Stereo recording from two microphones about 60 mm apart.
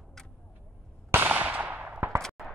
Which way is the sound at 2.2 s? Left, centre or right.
Centre.